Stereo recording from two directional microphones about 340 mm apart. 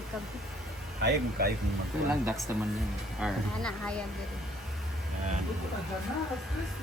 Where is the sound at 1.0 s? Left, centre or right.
Right.